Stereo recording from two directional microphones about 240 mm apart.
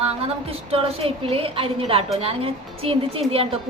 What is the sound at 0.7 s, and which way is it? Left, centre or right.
A woman's voice, right.